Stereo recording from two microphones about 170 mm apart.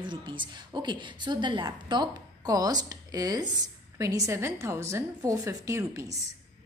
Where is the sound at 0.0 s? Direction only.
30° right (ahead or behind).